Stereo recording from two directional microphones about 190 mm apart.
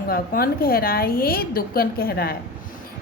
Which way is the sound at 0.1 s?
50° left (ahead or behind).